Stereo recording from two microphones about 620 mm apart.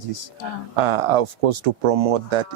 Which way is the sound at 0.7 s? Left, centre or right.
Right.